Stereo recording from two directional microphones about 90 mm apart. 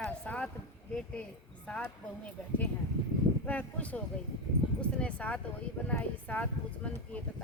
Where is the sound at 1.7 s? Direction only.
10° left (ahead or behind).